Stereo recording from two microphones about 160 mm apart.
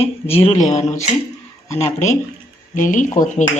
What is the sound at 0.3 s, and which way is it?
Speech, 40° left (ahead or behind).